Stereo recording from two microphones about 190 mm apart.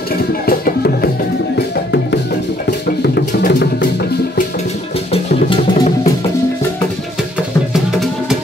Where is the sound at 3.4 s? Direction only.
60° left (ahead or behind).